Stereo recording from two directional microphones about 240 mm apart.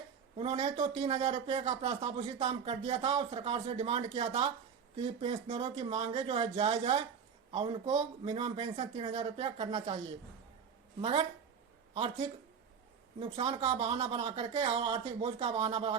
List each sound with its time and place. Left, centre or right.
0.3 s speech: right
11.0 s speech: right